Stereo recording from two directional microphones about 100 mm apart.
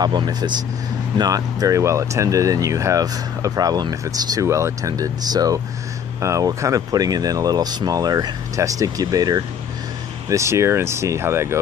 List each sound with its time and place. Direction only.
0.0 s speech: 45° right (ahead or behind)
10.3 s speech: 30° right (ahead or behind)